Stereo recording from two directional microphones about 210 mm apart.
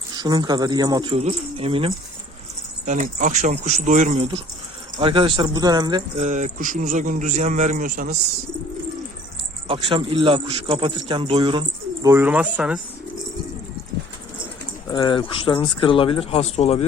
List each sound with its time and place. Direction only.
0.1 s a man's voice: 20° right (ahead or behind)
2.8 s a man's voice: 35° right (ahead or behind); by 6.0 s 20° right (ahead or behind)
6.1 s a man's voice: 35° right (ahead or behind)
9.6 s a man's voice: 25° right (ahead or behind)
12.0 s speech: 10° right (ahead or behind)
14.9 s speech: 20° left (ahead or behind)